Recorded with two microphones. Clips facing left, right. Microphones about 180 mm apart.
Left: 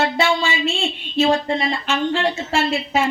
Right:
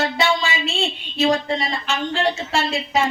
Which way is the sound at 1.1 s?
35° left (ahead or behind).